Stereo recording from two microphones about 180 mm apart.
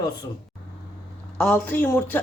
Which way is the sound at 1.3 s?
5° left (ahead or behind).